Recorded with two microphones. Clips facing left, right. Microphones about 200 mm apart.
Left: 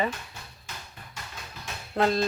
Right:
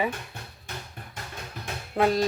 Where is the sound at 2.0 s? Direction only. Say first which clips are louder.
Right 1 dB; 10° right (ahead or behind).